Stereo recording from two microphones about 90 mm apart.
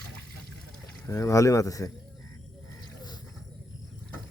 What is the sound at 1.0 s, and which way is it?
Speech, 35° left (ahead or behind).